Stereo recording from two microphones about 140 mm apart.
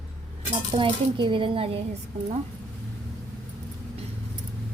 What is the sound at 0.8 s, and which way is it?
Speech, 35° right (ahead or behind).